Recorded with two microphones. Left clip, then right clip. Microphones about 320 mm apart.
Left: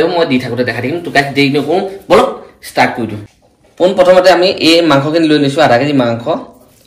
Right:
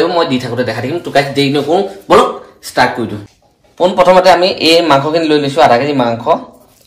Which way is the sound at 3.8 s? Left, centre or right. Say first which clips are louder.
Even; right.